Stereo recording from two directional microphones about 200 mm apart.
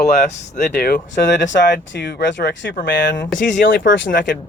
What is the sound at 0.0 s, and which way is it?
Speech, 50° left (ahead or behind).